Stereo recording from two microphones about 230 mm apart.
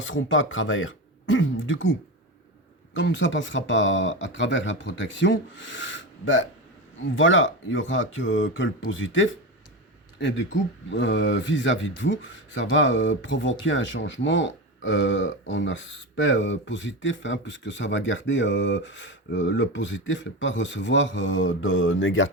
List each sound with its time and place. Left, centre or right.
0.0 s speech: left